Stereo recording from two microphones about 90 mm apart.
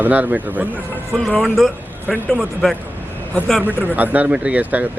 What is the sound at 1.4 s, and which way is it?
A man's voice, centre (ahead or behind).